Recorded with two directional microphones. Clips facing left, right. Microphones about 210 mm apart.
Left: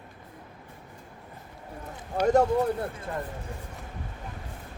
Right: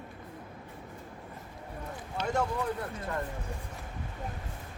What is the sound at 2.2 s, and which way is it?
Speech, 40° left (ahead or behind).